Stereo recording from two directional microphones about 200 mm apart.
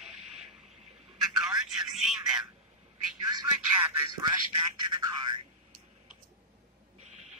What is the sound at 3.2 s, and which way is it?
Telephone, 20° right (ahead or behind).